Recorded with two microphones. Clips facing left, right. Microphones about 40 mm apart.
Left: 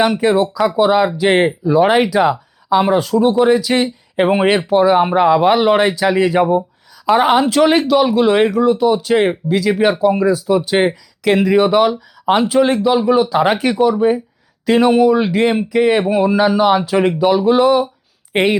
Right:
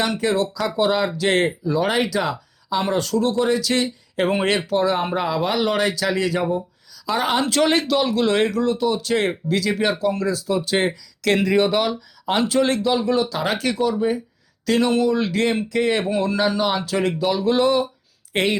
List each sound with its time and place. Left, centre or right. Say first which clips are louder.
0.0 s speech: left 7 dB; left
6.5 s a sound: left 8 dB; left
7.3 s speech: left 6 dB; centre
18.3 s speech: left 6 dB; left